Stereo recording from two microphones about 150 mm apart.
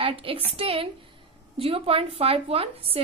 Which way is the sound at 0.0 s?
40° right (ahead or behind).